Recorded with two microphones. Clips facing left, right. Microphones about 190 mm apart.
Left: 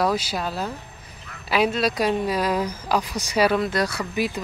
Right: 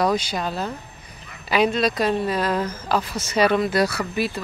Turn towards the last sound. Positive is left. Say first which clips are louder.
# right 3 dB
turn(degrees=-5)  # may be behind; listen again after turning